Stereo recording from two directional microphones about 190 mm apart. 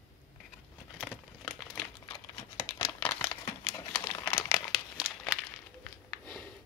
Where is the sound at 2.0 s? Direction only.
25° left (ahead or behind); by 5.3 s 5° left (ahead or behind).